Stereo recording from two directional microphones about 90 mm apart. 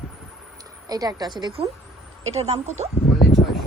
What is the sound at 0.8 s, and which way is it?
Speech, 45° right (ahead or behind).